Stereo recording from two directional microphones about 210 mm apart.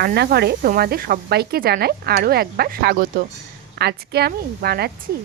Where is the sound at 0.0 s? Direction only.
50° right (ahead or behind).